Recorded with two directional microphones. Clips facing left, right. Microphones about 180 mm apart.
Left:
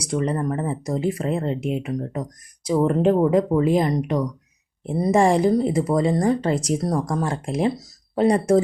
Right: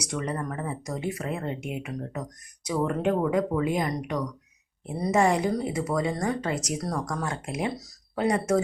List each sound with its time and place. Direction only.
0.0 s speech: 30° left (ahead or behind)